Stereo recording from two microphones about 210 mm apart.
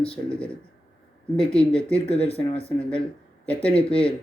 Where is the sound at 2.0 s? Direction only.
30° left (ahead or behind).